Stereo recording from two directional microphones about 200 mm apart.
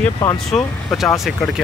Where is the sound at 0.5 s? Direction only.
Centre (ahead or behind).